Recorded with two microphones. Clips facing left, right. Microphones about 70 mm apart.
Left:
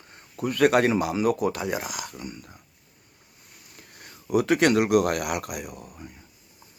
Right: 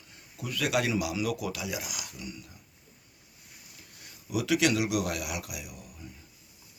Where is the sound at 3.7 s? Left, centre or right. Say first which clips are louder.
Left 8 dB; left.